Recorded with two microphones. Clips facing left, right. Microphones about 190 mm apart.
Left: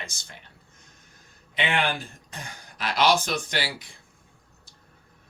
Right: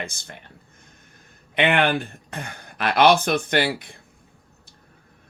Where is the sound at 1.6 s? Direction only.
60° right (ahead or behind).